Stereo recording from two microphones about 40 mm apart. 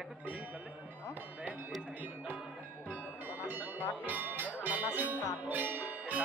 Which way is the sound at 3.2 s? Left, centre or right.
Right.